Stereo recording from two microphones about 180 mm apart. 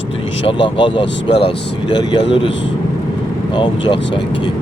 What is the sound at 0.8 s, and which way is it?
Speech, 25° left (ahead or behind).